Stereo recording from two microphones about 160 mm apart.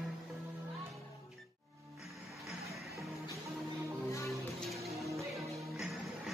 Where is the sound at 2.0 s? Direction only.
Centre (ahead or behind).